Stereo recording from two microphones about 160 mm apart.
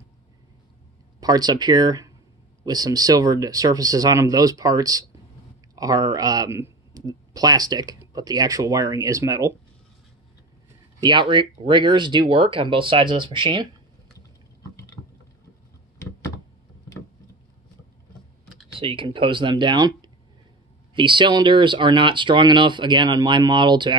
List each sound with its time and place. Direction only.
1.2 s speech: 25° right (ahead or behind)
11.0 s speech: 30° right (ahead or behind)
18.8 s speech: 35° right (ahead or behind)